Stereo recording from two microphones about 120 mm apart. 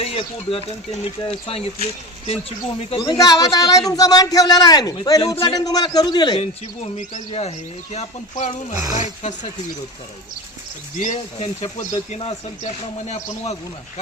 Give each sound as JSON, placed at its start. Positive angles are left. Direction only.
{"t": 0.0, "sound": "speech", "side_deg": 50}
{"t": 3.0, "sound": "a man's voice", "side_deg": 35}
{"t": 5.3, "sound": "speech", "side_deg": 45}
{"t": 5.5, "sound": "a man's voice", "side_deg": 35}
{"t": 6.8, "sound": "speech", "side_deg": 65}
{"t": 8.7, "sound": "speech", "side_deg": -30}
{"t": 9.0, "sound": "speech", "side_deg": 75}
{"t": 10.9, "sound": "speech", "side_deg": 85}